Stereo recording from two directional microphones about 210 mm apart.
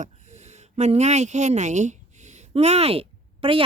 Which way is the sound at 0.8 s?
35° right (ahead or behind).